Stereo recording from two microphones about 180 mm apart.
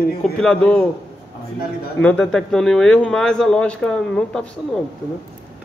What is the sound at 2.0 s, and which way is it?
Speech, 5° left (ahead or behind).